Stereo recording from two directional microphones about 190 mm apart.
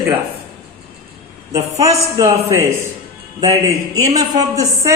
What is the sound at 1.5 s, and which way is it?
A woman's voice, 20° right (ahead or behind).